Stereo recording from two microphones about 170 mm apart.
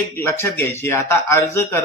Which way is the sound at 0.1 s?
15° left (ahead or behind).